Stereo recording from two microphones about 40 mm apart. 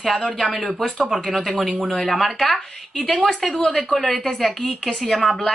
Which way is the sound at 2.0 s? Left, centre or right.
Centre.